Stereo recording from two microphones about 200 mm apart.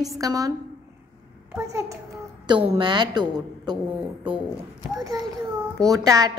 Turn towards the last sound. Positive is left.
turn(degrees=-15)  # may be behind; listen again after turning